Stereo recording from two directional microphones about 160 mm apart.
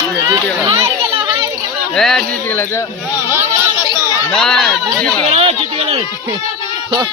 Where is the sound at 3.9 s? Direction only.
20° right (ahead or behind).